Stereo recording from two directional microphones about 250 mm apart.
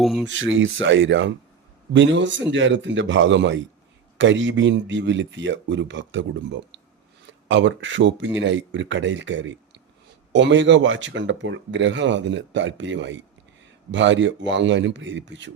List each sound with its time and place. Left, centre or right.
0.0 s speech: centre
0.3 s speech: right